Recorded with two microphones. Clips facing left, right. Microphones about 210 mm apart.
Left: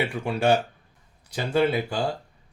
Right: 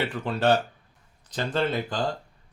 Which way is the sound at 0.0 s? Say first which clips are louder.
Left 1 dB; 10° left (ahead or behind).